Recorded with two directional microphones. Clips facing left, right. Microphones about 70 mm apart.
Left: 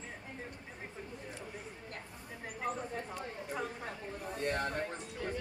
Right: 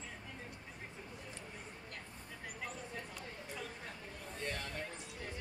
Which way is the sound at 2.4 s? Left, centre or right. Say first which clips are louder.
Left 8 dB; left.